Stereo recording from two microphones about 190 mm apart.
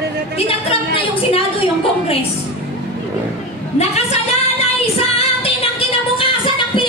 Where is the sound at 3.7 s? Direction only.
35° left (ahead or behind).